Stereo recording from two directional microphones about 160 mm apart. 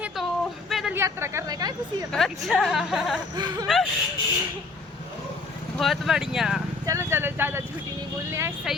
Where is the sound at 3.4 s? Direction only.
25° right (ahead or behind).